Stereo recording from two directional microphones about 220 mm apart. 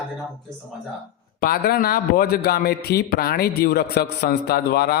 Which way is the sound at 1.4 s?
45° left (ahead or behind).